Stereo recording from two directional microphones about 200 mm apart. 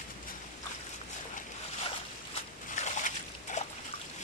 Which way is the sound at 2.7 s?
35° left (ahead or behind).